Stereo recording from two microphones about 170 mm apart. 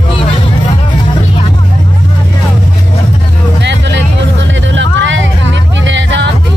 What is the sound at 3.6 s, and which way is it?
Music, 90° right.